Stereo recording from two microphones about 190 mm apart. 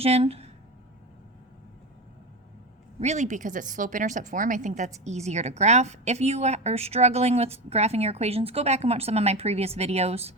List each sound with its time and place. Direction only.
0.0 s a woman's voice: 30° right (ahead or behind)
3.0 s a woman's voice: 35° right (ahead or behind)